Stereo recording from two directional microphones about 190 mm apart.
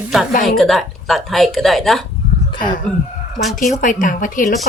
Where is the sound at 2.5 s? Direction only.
25° left (ahead or behind).